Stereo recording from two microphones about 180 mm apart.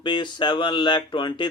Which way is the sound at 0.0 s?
25° left (ahead or behind).